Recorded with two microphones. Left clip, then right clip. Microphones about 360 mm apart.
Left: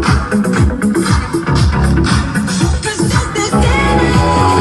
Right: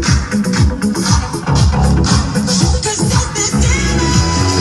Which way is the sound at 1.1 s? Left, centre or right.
Centre.